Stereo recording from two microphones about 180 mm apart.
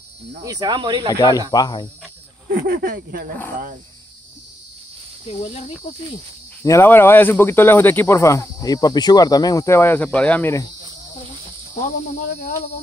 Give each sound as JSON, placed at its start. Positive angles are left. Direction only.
{"t": 0.4, "sound": "speech", "side_deg": -20}
{"t": 1.5, "sound": "speech", "side_deg": 25}
{"t": 2.5, "sound": "speech", "side_deg": -55}
{"t": 5.3, "sound": "speech", "side_deg": 35}
{"t": 6.6, "sound": "speech", "side_deg": 15}